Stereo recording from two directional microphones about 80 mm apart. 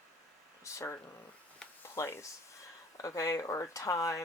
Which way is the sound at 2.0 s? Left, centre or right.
Left.